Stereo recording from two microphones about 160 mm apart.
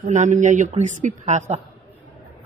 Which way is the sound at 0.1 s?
50° right (ahead or behind).